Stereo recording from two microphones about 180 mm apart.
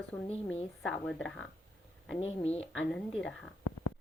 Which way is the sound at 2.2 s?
35° left (ahead or behind).